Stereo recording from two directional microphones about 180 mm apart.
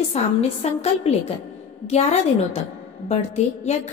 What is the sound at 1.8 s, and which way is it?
Speech, 35° left (ahead or behind).